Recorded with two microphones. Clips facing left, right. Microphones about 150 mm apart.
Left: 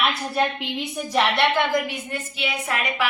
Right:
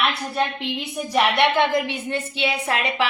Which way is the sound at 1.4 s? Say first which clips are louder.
Right 2 dB; 25° right (ahead or behind).